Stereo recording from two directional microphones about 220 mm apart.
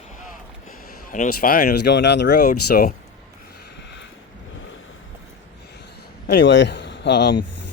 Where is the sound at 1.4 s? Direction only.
40° left (ahead or behind).